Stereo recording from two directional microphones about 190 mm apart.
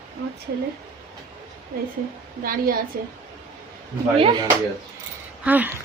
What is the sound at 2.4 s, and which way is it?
Speech, 50° right (ahead or behind).